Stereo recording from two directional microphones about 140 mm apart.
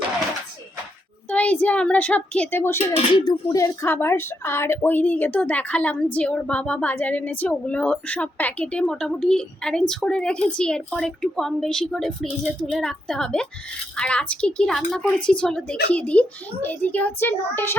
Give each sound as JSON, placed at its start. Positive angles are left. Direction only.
{"t": 1.3, "sound": "speech", "side_deg": 10}
{"t": 2.9, "sound": "speech", "side_deg": 35}
{"t": 3.5, "sound": "a woman's voice", "side_deg": 20}